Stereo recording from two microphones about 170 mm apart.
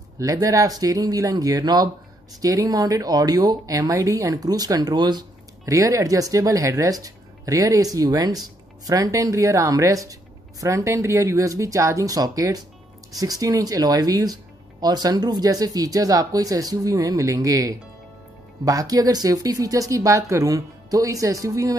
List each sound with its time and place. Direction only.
0.2 s speech: 20° right (ahead or behind)